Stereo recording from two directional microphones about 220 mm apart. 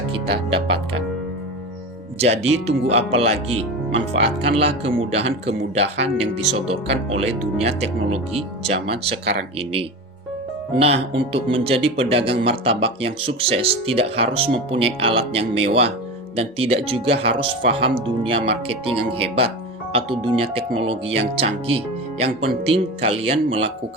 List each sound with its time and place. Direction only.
0.1 s speech: 25° right (ahead or behind)
2.2 s speech: 30° right (ahead or behind)
10.8 s speech: 25° right (ahead or behind)